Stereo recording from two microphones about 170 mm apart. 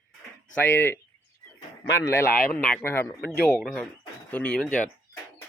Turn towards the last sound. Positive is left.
turn(degrees=5)  # may be behind; listen again after turning